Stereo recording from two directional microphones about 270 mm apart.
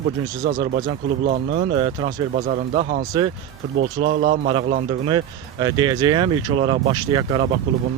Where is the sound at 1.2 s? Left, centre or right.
Right.